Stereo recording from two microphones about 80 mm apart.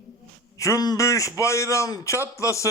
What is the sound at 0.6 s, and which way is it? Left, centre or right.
A man's voice, left.